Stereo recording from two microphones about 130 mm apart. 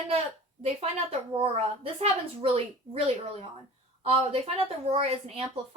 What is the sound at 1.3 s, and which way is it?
A woman's voice, 45° right (ahead or behind).